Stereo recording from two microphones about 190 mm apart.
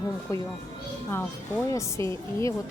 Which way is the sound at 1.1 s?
10° left (ahead or behind).